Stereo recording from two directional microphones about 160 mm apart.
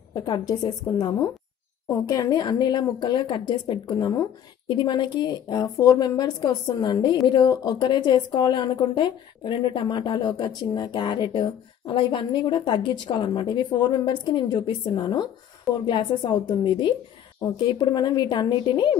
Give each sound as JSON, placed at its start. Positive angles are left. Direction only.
{"t": 0.1, "sound": "speech", "side_deg": 25}